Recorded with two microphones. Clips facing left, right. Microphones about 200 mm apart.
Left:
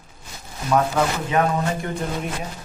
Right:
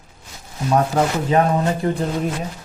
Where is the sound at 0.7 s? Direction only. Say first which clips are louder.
Right 2 dB; 35° right (ahead or behind).